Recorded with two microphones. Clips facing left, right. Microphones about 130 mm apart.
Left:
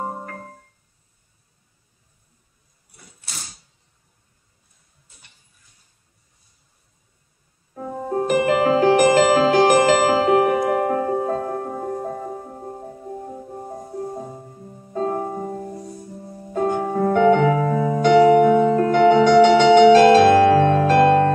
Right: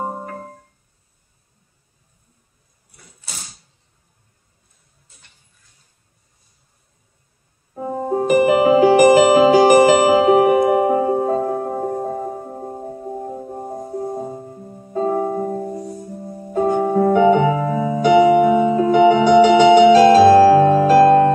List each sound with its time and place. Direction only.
0.0 s keyboard: 10° right (ahead or behind)
8.1 s music: 10° right (ahead or behind)
14.9 s music: 10° right (ahead or behind)
16.3 s music: 25° right (ahead or behind)
16.5 s music: 5° right (ahead or behind)